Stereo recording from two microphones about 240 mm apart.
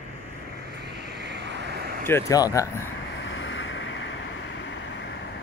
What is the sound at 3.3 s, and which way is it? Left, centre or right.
Vehicle, left.